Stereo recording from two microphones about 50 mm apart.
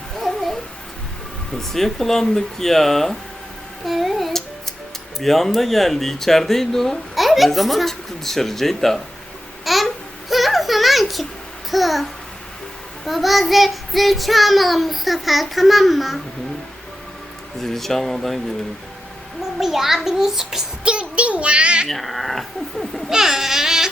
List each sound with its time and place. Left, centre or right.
0.2 s babbling: centre
1.5 s speech: centre
3.8 s a sound: centre
5.2 s speech: centre
9.6 s babbling: centre
11.7 s speech: centre
13.1 s speech: centre
17.6 s speech: centre
19.5 s a child's voice: centre
20.8 s a child's voice: right
21.8 s speech: centre
23.1 s a sound: centre